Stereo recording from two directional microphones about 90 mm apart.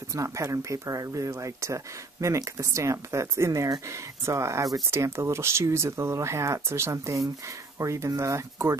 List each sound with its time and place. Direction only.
0.1 s speech: 35° right (ahead or behind)